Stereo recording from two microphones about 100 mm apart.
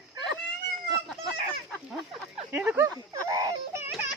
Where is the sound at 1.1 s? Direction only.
Centre (ahead or behind).